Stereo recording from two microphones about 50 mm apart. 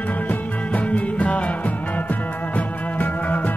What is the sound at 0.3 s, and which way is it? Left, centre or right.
Music, left.